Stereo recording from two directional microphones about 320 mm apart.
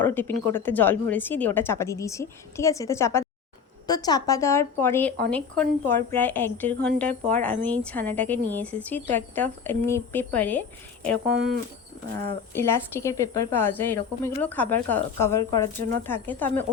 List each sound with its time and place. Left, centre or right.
0.0 s a woman's voice: centre
11.3 s speech: right
12.2 s a woman's voice: centre